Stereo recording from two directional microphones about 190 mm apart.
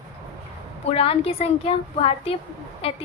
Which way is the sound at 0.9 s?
30° left (ahead or behind).